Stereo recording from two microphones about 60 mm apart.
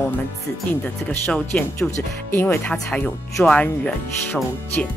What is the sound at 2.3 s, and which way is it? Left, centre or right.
Speech, left.